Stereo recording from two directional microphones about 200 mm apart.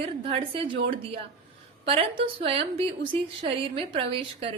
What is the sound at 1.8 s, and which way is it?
A woman's voice, 30° right (ahead or behind).